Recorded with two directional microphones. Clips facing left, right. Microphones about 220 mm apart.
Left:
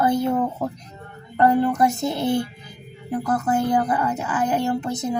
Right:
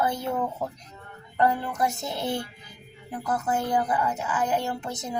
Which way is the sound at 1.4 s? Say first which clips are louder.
Left 7 dB; 55° left (ahead or behind).